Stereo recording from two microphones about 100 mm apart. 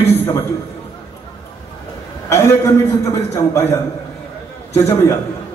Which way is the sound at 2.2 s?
25° left (ahead or behind).